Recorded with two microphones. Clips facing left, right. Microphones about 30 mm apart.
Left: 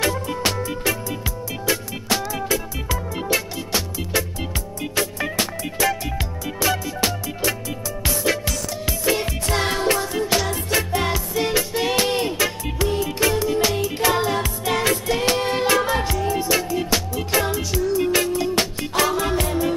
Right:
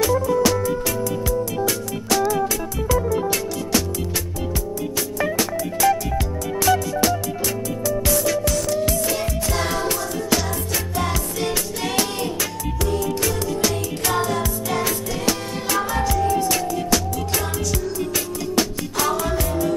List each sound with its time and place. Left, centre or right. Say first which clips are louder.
0.0 s music: right 4 dB; left
1.7 s music: even; left
6.6 s music: right 3 dB; left
8.8 s music: even; left
11.1 s music: left 2 dB; centre
12.0 s music: left 3 dB; left
15.0 s music: left 4 dB; left